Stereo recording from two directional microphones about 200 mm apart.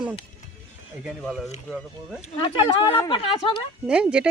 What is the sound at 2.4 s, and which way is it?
Speech, 25° left (ahead or behind).